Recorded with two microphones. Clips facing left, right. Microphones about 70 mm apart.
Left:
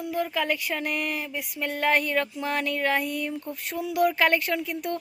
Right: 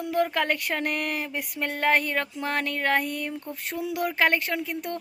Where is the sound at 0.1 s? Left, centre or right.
Right.